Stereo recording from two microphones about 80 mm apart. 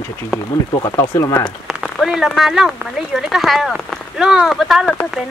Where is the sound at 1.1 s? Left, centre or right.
Left.